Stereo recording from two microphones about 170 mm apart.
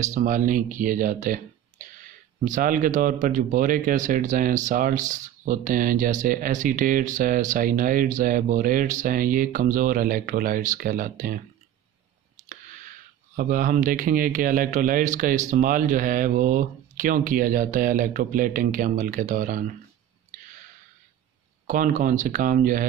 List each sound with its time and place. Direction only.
0.0 s speech: 45° right (ahead or behind)
12.4 s a sound: 50° right (ahead or behind)
13.4 s speech: 55° right (ahead or behind)
21.6 s speech: 50° right (ahead or behind)